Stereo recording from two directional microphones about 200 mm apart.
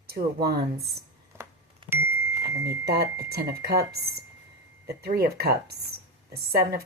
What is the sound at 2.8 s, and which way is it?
Speech, 55° right (ahead or behind).